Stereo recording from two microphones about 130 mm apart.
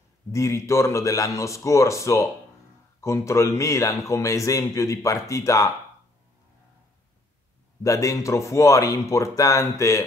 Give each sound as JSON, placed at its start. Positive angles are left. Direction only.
{"t": 0.3, "sound": "speech", "side_deg": 20}
{"t": 7.8, "sound": "speech", "side_deg": 25}